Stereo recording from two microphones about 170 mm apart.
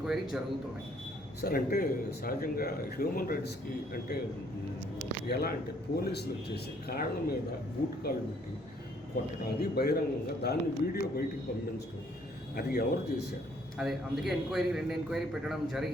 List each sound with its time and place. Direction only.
0.0 s a man's voice: centre (ahead or behind)
1.4 s a man's voice: 60° left (ahead or behind)
4.1 s speech: 70° left (ahead or behind)
5.3 s a man's voice: 65° left (ahead or behind)
9.6 s a man's voice: 65° left (ahead or behind)
12.5 s a man's voice: 60° left (ahead or behind)
13.7 s a man's voice: centre (ahead or behind)